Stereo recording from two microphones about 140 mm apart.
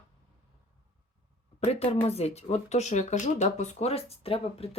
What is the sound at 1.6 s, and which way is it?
Speech, 50° left (ahead or behind).